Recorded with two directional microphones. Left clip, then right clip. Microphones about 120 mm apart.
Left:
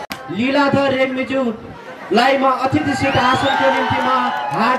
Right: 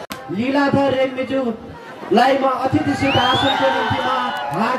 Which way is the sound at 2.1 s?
45° left (ahead or behind).